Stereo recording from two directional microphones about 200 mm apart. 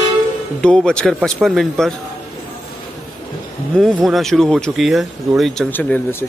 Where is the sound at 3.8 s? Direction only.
Centre (ahead or behind).